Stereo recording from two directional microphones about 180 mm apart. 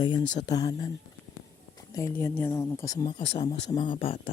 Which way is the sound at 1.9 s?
15° left (ahead or behind).